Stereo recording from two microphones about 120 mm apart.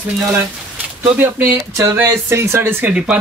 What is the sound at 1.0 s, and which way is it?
Speech, 20° right (ahead or behind).